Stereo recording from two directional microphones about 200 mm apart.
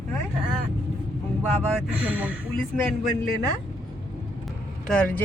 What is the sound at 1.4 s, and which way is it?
Speech, 10° right (ahead or behind).